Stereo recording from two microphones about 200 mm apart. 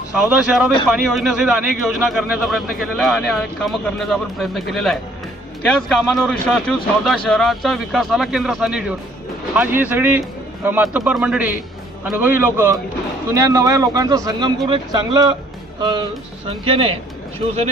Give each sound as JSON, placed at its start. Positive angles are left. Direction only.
{"t": 0.1, "sound": "a man's voice", "side_deg": -5}